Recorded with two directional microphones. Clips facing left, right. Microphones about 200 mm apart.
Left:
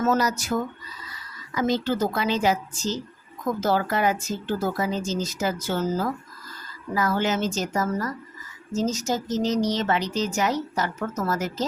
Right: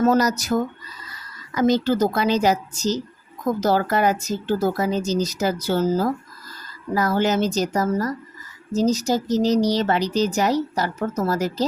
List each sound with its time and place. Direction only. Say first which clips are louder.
0.0 s speech: right 5 dB; 35° right (ahead or behind)